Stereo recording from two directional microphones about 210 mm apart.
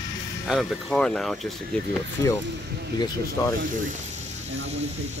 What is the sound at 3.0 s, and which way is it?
Speech, 15° left (ahead or behind).